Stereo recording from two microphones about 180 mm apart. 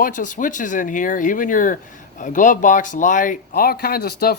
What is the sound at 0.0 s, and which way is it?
Speech, 45° left (ahead or behind).